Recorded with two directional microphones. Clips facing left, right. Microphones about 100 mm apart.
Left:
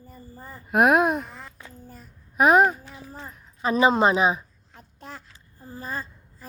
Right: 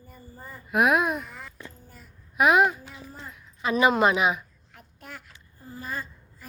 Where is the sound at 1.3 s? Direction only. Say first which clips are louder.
Even; 35° left (ahead or behind).